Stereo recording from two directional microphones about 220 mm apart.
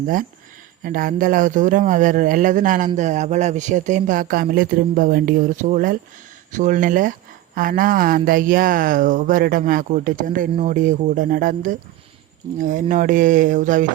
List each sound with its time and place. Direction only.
0.9 s speech: 40° right (ahead or behind)